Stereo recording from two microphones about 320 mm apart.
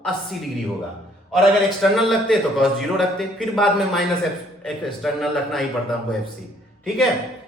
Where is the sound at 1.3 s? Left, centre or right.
Centre.